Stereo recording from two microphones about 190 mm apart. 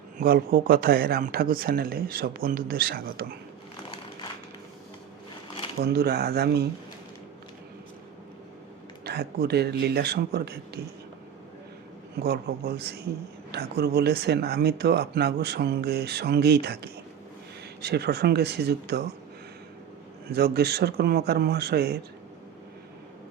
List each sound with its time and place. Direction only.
0.2 s speech: 50° right (ahead or behind)
5.8 s speech: 55° right (ahead or behind)
9.0 s speech: 60° right (ahead or behind)
12.2 s speech: 55° right (ahead or behind)
20.3 s speech: 55° right (ahead or behind)